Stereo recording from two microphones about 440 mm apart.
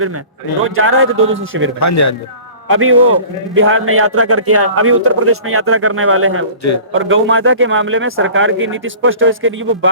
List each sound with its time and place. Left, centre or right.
0.6 s a man's voice: right
1.8 s speech: left
2.6 s a man's voice: right